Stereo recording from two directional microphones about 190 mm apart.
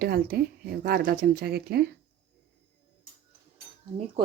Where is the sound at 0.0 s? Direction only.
55° right (ahead or behind).